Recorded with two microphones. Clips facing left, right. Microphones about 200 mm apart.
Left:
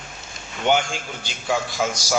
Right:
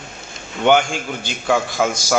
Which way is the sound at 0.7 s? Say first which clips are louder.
Right 6 dB; 55° right (ahead or behind).